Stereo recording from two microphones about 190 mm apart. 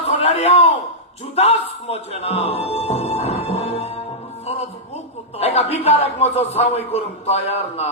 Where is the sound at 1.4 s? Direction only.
35° left (ahead or behind).